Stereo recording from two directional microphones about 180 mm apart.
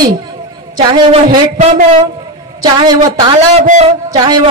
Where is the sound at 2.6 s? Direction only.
20° right (ahead or behind).